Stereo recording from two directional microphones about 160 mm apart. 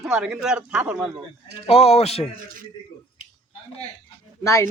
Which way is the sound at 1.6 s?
40° left (ahead or behind).